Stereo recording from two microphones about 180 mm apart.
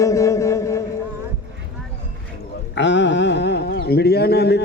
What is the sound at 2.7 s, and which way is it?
Speech, 80° left.